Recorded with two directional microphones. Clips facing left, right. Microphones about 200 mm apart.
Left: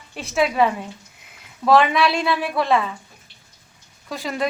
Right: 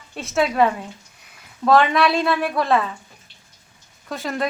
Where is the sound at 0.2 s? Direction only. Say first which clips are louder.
Right 1 dB; centre (ahead or behind).